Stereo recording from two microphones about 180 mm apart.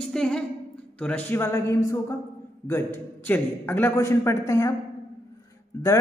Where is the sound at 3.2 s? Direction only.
10° left (ahead or behind).